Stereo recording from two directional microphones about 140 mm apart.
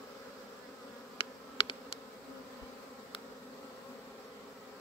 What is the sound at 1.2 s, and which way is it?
Bee, 40° left (ahead or behind).